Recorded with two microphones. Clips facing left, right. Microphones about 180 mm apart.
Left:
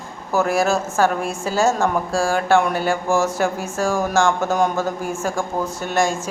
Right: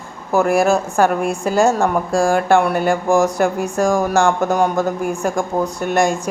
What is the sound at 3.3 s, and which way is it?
Speech, centre (ahead or behind).